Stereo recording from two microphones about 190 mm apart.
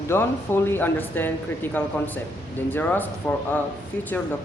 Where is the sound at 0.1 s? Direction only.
10° left (ahead or behind).